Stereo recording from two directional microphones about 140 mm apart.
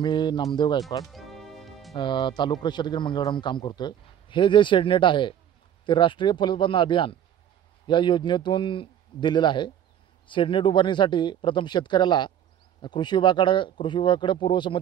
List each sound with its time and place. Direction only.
0.0 s a man's voice: 30° left (ahead or behind)
1.1 s music: centre (ahead or behind)
2.0 s a man's voice: 35° left (ahead or behind)